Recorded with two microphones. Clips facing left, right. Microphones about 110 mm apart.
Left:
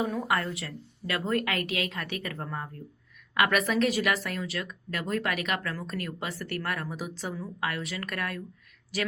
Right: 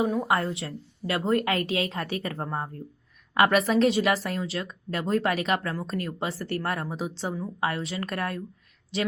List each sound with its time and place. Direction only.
0.0 s speech: 25° right (ahead or behind)